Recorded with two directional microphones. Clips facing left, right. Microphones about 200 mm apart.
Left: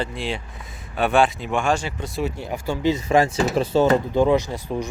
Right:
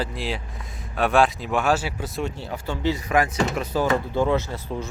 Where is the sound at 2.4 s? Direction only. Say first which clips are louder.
Left 3 dB; 15° left (ahead or behind).